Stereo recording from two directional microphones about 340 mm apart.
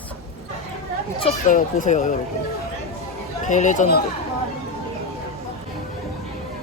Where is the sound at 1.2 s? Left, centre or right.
Left.